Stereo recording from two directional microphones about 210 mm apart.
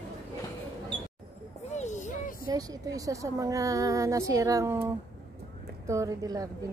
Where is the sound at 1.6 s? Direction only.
35° left (ahead or behind).